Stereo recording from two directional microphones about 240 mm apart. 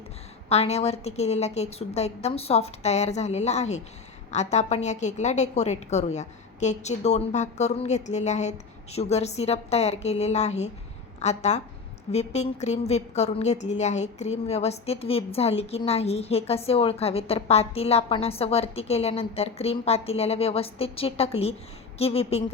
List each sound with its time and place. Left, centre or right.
0.4 s a woman's voice: left